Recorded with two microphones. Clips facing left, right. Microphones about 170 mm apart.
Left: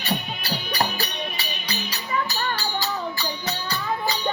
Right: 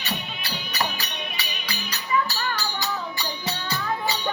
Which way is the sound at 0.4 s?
35° left (ahead or behind).